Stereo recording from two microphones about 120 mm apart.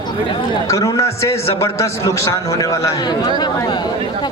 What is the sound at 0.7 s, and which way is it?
A man's voice, 30° left (ahead or behind).